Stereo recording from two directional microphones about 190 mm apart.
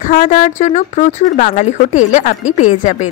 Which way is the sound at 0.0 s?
45° left (ahead or behind).